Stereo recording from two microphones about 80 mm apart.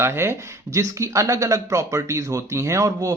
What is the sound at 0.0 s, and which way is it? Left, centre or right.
Speech, right.